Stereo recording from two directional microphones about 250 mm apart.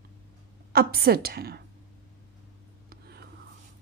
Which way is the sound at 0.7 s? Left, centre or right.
Right.